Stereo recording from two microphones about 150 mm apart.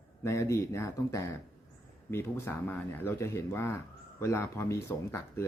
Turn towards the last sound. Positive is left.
turn(degrees=20)  # may be behind; listen again after turning